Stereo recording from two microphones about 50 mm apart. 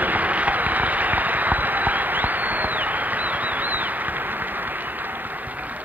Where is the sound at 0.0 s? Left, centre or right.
Right.